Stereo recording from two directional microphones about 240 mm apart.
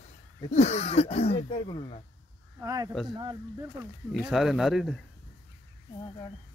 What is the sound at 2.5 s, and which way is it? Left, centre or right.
Speech, centre.